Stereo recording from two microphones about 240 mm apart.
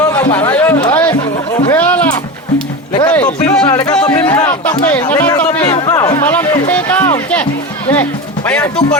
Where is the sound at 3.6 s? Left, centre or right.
Centre.